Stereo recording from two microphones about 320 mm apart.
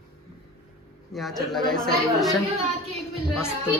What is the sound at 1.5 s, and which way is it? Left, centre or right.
Speech, centre.